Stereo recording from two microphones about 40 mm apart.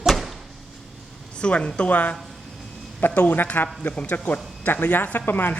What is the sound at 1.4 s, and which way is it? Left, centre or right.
Speech, left.